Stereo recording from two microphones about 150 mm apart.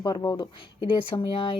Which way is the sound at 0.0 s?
25° left (ahead or behind).